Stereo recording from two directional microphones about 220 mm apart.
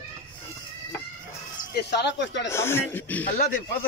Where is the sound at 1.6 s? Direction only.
50° left (ahead or behind).